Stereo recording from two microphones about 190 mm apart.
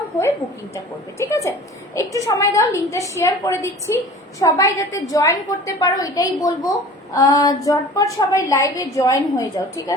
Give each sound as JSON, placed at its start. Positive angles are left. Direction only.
{"t": 1.2, "sound": "a woman's voice", "side_deg": 15}